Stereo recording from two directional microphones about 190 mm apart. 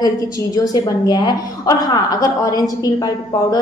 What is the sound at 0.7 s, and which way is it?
A woman's voice, 20° left (ahead or behind).